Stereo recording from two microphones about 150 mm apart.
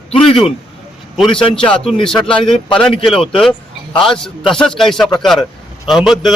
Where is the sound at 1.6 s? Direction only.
5° left (ahead or behind).